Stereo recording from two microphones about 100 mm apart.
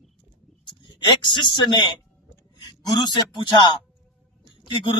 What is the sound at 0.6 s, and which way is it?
Speech, 50° left (ahead or behind).